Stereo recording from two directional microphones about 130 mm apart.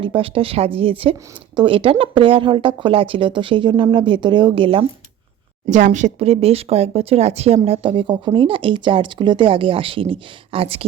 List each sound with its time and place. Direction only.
0.0 s speech: 45° right (ahead or behind)
5.6 s speech: 70° right (ahead or behind); by 10.8 s 45° right (ahead or behind)